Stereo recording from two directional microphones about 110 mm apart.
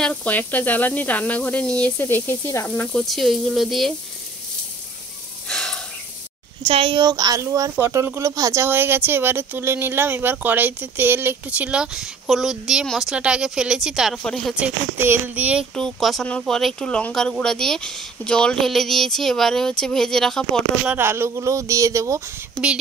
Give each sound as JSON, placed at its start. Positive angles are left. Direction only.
{"t": 0.0, "sound": "speech", "side_deg": 15}
{"t": 5.5, "sound": "a sound", "side_deg": 5}
{"t": 6.6, "sound": "speech", "side_deg": -60}
{"t": 13.1, "sound": "a woman's voice", "side_deg": -10}
{"t": 14.1, "sound": "speech", "side_deg": 5}
{"t": 14.5, "sound": "a woman's voice", "side_deg": -10}
{"t": 15.7, "sound": "speech", "side_deg": 5}
{"t": 21.0, "sound": "speech", "side_deg": -20}